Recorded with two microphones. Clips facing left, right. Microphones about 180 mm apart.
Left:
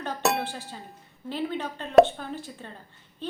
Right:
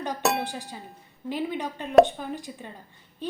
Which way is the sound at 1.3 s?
15° right (ahead or behind).